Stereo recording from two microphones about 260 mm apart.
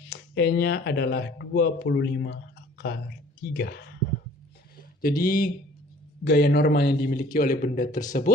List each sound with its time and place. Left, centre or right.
0.1 s a man's voice: left